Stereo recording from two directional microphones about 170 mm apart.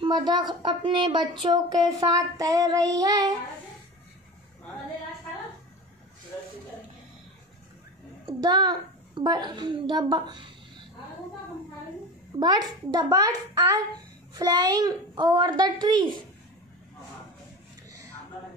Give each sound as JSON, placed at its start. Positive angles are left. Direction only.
{"t": 0.0, "sound": "speech", "side_deg": -25}
{"t": 8.4, "sound": "a child's voice", "side_deg": -25}
{"t": 12.4, "sound": "speech", "side_deg": -25}